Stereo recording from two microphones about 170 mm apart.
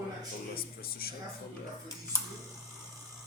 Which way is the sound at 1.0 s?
65° left (ahead or behind).